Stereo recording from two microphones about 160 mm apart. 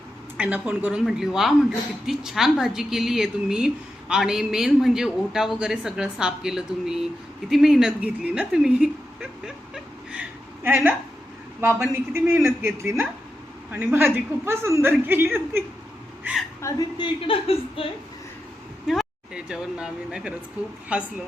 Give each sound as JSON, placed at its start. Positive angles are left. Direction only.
{"t": 0.3, "sound": "a woman's voice", "side_deg": -5}
{"t": 9.7, "sound": "whimper", "side_deg": -10}
{"t": 12.1, "sound": "a woman's voice", "side_deg": -15}
{"t": 16.6, "sound": "a woman's voice", "side_deg": 20}
{"t": 17.0, "sound": "speech", "side_deg": 35}
{"t": 18.9, "sound": "a woman's voice", "side_deg": -5}